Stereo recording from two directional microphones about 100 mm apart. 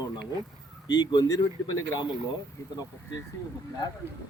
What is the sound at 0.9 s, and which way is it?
Speech, 40° left (ahead or behind).